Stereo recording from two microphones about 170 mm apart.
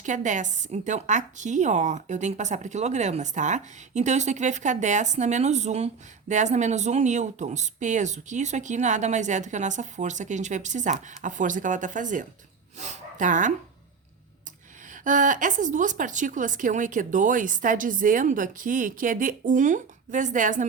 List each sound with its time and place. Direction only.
0.0 s a woman's voice: 45° right (ahead or behind)
15.0 s a woman's voice: 50° right (ahead or behind)